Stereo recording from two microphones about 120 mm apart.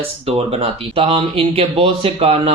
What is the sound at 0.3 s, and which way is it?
Speech, 50° right (ahead or behind).